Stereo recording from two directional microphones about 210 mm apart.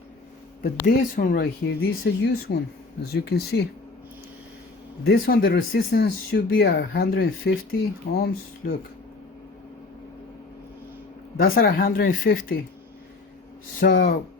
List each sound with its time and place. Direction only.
0.6 s speech: 40° left (ahead or behind)
5.0 s speech: 45° left (ahead or behind)
11.3 s speech: 45° left (ahead or behind)
13.8 s speech: 50° left (ahead or behind)